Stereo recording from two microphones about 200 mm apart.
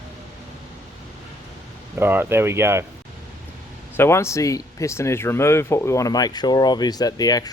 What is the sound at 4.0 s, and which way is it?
Speech, 15° left (ahead or behind).